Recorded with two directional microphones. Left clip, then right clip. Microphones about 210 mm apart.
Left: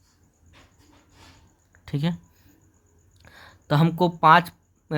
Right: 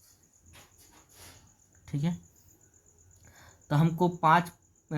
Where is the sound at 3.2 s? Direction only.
40° left (ahead or behind).